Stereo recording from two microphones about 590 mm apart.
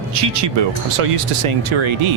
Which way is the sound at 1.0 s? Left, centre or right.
Right.